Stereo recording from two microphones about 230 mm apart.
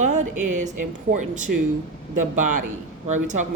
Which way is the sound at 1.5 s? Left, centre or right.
Right.